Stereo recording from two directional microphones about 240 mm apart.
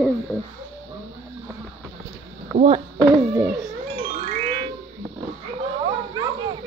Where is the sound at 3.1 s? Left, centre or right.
Centre.